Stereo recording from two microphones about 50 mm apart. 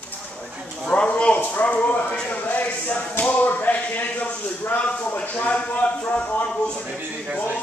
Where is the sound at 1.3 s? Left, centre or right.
Left.